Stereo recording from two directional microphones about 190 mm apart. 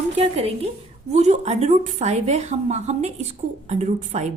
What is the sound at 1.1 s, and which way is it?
A woman's voice, 35° right (ahead or behind).